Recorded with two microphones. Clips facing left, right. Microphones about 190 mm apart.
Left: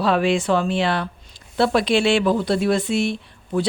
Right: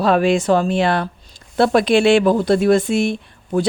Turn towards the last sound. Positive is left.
turn(degrees=-50)  # may be behind; listen again after turning